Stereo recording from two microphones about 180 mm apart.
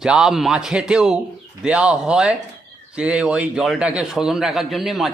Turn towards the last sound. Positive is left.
turn(degrees=0)  # may be behind; listen again after turning